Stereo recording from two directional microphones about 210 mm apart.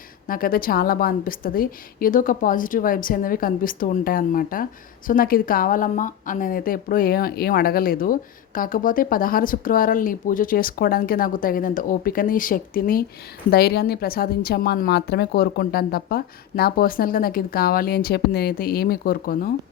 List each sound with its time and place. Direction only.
0.3 s a woman's voice: 45° left (ahead or behind)